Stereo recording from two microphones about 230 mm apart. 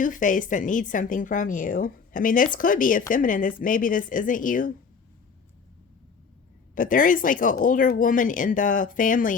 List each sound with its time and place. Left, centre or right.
0.0 s a woman's voice: left
6.7 s a woman's voice: left